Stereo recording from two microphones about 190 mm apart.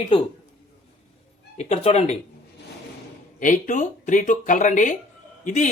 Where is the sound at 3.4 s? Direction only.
45° left (ahead or behind).